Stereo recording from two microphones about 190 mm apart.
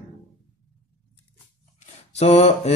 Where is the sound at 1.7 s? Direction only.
35° left (ahead or behind).